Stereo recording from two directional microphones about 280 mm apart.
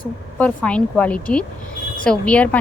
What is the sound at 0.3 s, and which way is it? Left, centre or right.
Speech, centre.